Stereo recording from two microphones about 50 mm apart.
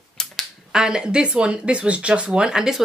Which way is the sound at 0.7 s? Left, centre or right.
Centre.